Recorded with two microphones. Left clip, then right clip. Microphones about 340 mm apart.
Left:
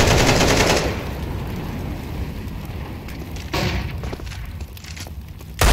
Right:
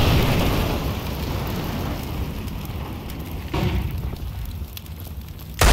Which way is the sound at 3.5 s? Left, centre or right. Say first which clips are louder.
Left 4 dB; centre.